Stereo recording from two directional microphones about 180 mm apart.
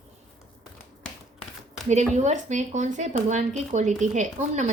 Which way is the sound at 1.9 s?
40° right (ahead or behind).